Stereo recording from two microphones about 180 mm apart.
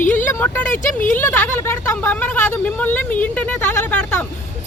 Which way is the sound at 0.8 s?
45° left (ahead or behind).